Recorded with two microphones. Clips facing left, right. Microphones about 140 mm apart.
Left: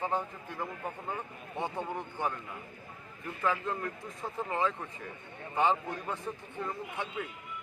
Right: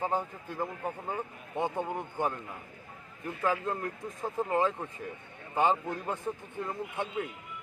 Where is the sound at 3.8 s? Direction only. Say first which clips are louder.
Right 2 dB; 20° right (ahead or behind).